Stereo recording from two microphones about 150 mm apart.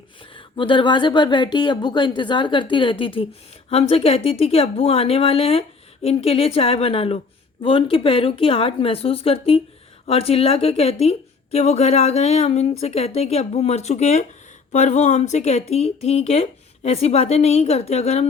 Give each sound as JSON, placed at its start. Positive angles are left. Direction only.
{"t": 0.2, "sound": "a woman's voice", "side_deg": 35}